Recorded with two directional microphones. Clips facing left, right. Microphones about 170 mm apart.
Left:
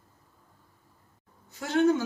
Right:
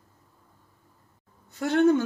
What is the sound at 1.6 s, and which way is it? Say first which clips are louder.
Speech: right 3 dB; 60° right (ahead or behind).